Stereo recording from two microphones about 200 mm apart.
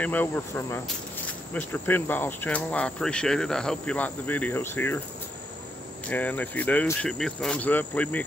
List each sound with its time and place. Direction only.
0.0 s speech: 10° left (ahead or behind)
6.0 s speech: 10° left (ahead or behind)